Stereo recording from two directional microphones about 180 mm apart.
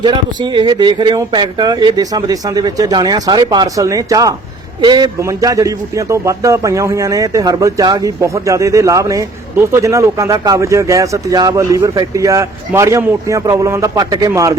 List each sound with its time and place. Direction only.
0.0 s a man's voice: 25° right (ahead or behind)